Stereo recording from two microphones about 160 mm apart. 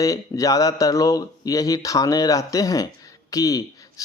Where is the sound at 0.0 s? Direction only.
20° left (ahead or behind).